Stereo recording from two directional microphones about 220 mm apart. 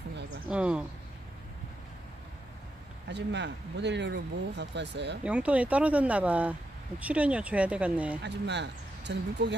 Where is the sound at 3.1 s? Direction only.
50° right (ahead or behind).